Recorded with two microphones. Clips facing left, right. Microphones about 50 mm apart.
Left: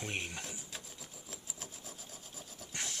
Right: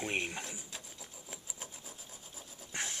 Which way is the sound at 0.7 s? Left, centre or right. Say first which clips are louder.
Even; centre.